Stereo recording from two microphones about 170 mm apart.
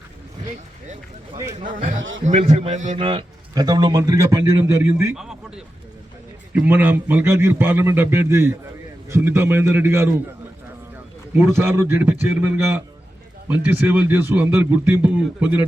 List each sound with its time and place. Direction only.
2.2 s a man's voice: 40° right (ahead or behind)
3.0 s a man's voice: 30° right (ahead or behind)
5.1 s a man's voice: 5° right (ahead or behind)
11.3 s a man's voice: 15° right (ahead or behind)